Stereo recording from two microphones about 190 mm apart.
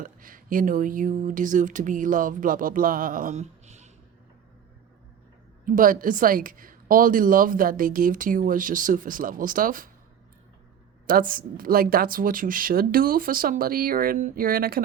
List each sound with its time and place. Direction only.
0.0 s speech: 45° right (ahead or behind)
5.6 s speech: 45° right (ahead or behind)
11.0 s speech: 50° right (ahead or behind)